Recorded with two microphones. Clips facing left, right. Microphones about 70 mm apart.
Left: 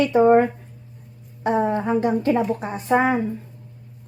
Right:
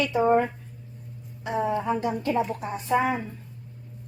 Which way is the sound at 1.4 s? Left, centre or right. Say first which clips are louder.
Left 5 dB; left.